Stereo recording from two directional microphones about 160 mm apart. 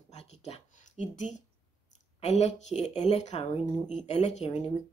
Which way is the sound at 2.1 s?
45° left (ahead or behind).